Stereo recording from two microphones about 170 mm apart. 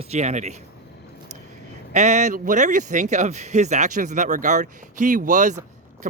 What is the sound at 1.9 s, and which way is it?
Speech, 40° right (ahead or behind).